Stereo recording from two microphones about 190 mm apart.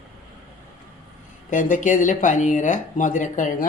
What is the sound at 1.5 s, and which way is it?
Speech, 45° left (ahead or behind).